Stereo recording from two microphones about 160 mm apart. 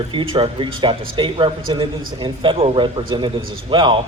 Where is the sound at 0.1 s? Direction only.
35° right (ahead or behind).